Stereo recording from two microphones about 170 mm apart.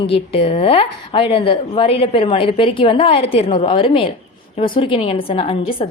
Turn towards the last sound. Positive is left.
turn(degrees=35)  # may be behind; listen again after turning